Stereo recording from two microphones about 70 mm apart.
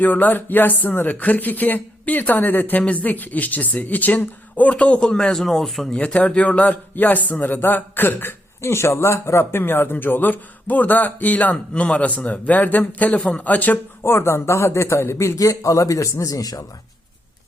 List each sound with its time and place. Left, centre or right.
0.0 s a man's voice: left; by 6.0 s centre
6.0 s a man's voice: centre
14.0 s a man's voice: left